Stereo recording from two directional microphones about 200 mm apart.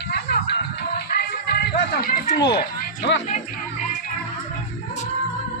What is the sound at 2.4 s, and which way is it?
Speech, 55° left (ahead or behind).